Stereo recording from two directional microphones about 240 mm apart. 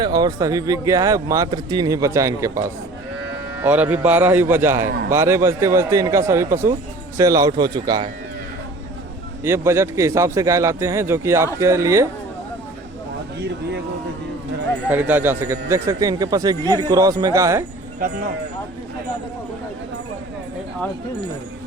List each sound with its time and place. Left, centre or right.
0.0 s a man's voice: centre
9.4 s a man's voice: centre
14.8 s a man's voice: centre